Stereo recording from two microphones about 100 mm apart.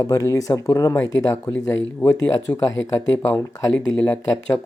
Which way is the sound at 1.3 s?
25° left (ahead or behind).